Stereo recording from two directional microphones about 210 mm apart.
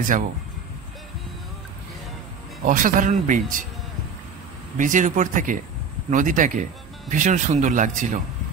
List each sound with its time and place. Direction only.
2.6 s speech: 40° right (ahead or behind)
4.7 s speech: 35° right (ahead or behind)